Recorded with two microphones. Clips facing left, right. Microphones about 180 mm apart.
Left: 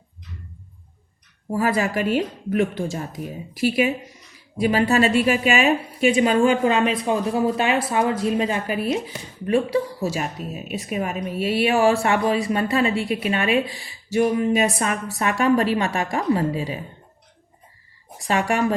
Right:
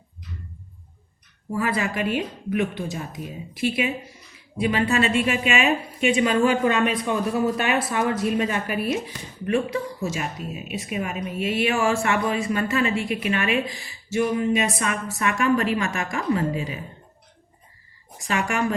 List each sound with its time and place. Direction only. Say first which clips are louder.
1.5 s speech: left 3 dB; 40° left (ahead or behind)
4.5 s a woman's voice: left 3 dB; 40° left (ahead or behind)